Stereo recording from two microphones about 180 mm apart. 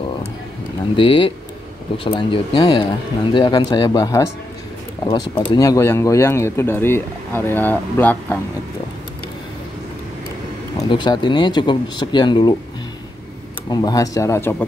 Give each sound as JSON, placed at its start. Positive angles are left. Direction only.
{"t": 0.9, "sound": "speech", "side_deg": 30}
{"t": 10.8, "sound": "speech", "side_deg": 25}
{"t": 13.7, "sound": "speech", "side_deg": 20}